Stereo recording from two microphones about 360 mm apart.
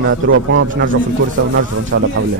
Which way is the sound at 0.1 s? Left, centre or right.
Right.